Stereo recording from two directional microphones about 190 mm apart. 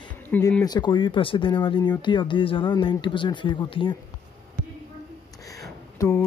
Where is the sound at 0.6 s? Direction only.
20° left (ahead or behind).